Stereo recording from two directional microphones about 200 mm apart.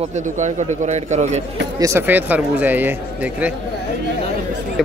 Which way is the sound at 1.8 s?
10° right (ahead or behind).